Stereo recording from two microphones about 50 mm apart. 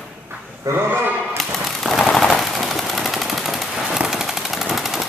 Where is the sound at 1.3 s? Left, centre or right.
Centre.